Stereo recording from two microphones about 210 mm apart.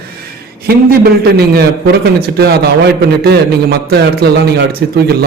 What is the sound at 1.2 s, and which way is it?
A man's voice, 50° right (ahead or behind).